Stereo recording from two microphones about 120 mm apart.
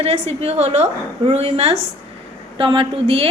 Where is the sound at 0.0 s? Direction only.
55° right (ahead or behind).